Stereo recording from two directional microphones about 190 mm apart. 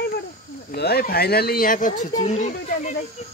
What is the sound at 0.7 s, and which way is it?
Speech, 55° left (ahead or behind).